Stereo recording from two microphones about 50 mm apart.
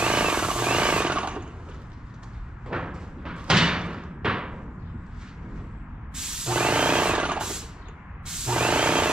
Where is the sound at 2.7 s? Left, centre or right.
Centre.